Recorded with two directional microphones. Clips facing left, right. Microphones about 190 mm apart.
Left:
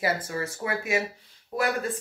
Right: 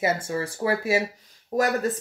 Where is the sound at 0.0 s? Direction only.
25° right (ahead or behind).